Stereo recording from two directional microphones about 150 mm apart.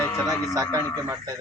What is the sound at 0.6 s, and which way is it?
Speech, 25° right (ahead or behind).